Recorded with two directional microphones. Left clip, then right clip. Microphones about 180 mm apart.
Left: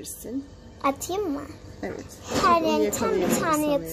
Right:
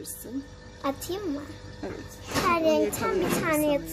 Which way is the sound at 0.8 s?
20° left (ahead or behind).